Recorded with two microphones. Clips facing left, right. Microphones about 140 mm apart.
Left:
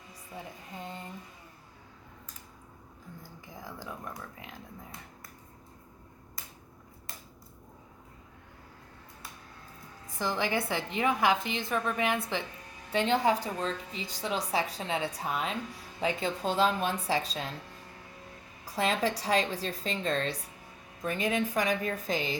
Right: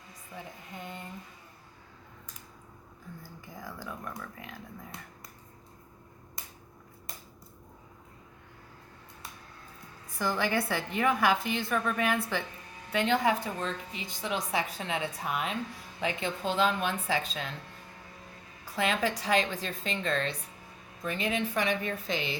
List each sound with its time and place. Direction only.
3.5 s a woman's voice: 20° left (ahead or behind)
10.1 s a woman's voice: 20° left (ahead or behind)
12.9 s a woman's voice: 30° left (ahead or behind)
18.6 s a woman's voice: 35° left (ahead or behind)